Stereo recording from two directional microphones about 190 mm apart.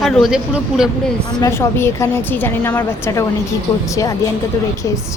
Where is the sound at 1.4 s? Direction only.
15° left (ahead or behind).